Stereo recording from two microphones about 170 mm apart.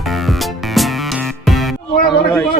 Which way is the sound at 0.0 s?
Centre (ahead or behind).